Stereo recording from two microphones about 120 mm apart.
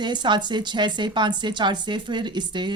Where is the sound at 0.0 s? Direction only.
40° right (ahead or behind).